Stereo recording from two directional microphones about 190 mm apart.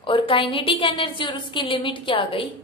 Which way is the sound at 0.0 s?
25° left (ahead or behind).